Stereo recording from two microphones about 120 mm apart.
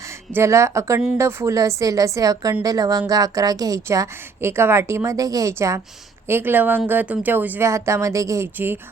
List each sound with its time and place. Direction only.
0.3 s a woman's voice: 25° right (ahead or behind)